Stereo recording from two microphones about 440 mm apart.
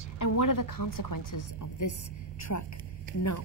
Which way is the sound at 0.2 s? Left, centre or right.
Left.